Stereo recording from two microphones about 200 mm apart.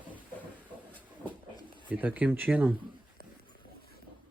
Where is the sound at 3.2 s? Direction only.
50° left (ahead or behind).